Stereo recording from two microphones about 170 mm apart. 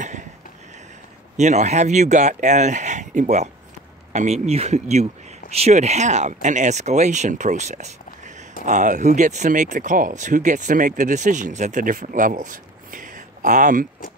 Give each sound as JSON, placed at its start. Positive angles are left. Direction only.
{"t": 1.3, "sound": "speech", "side_deg": -45}